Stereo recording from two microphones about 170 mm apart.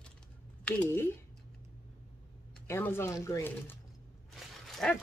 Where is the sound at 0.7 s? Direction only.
10° left (ahead or behind).